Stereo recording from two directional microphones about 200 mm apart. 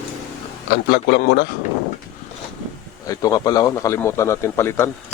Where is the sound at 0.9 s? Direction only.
55° left (ahead or behind).